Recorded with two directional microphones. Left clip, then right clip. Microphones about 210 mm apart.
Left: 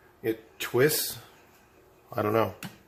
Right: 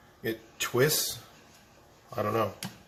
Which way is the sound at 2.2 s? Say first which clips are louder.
Left 3 dB; 50° left (ahead or behind).